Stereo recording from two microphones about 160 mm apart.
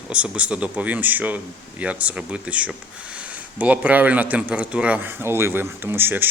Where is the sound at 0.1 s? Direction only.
5° right (ahead or behind).